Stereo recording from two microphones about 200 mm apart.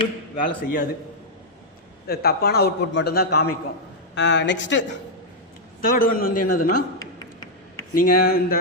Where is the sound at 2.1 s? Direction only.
50° left (ahead or behind).